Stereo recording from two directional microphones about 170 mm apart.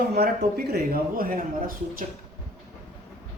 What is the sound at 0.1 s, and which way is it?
Speech, 70° right (ahead or behind).